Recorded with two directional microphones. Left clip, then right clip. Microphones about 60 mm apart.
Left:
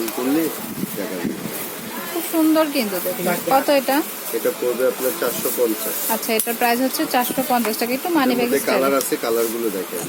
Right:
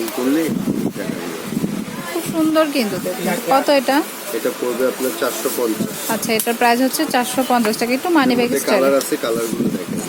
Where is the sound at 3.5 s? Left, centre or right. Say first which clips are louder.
Right 3 dB; right.